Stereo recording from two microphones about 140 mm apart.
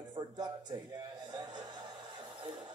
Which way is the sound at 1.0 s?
30° right (ahead or behind).